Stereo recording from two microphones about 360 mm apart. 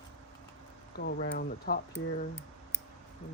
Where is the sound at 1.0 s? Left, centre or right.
Left.